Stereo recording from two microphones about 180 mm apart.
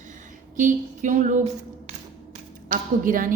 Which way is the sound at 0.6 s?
45° right (ahead or behind).